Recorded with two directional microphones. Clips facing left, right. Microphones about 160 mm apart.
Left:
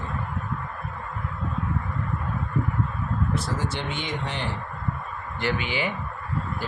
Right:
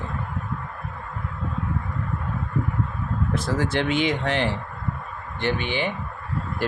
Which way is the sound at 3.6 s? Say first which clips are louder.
Right 8 dB; 90° right.